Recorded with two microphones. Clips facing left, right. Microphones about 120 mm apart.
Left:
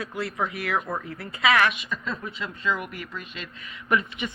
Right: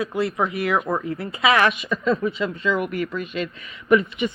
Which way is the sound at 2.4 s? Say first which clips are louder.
Right 2 dB; 80° right.